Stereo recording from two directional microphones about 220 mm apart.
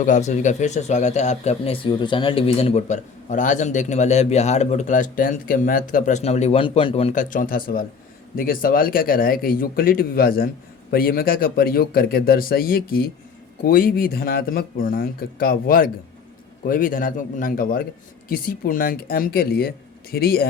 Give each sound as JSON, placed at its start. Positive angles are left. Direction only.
{"t": 0.0, "sound": "speech", "side_deg": 35}